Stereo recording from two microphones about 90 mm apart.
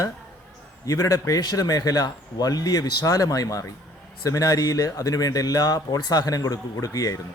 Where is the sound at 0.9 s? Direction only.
40° left (ahead or behind).